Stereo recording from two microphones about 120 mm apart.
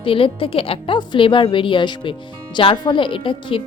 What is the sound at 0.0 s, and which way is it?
A woman's voice, 45° left (ahead or behind).